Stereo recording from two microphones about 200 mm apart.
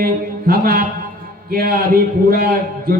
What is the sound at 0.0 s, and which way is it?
A man's voice, 45° right (ahead or behind).